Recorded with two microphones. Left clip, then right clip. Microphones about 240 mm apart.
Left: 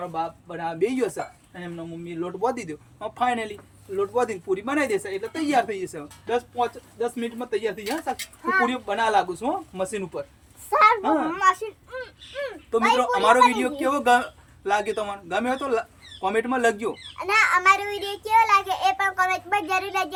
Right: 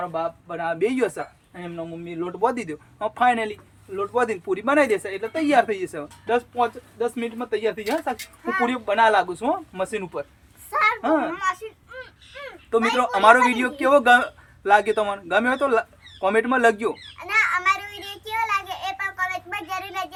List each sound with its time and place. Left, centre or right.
0.0 s speech: centre
2.1 s speech: centre
8.1 s speech: centre
8.6 s speech: centre
11.3 s speech: centre
13.0 s speech: centre
17.2 s a child's voice: centre